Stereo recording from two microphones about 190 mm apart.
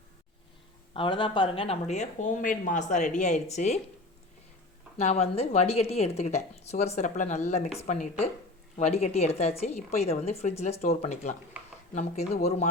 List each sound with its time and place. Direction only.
0.9 s speech: 25° left (ahead or behind)
4.9 s speech: 35° left (ahead or behind)
11.6 s a sound: 10° right (ahead or behind)
11.9 s speech: 35° left (ahead or behind)